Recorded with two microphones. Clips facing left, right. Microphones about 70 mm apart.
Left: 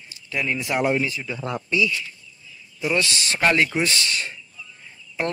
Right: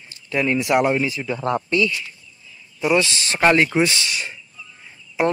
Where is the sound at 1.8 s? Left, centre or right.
Right.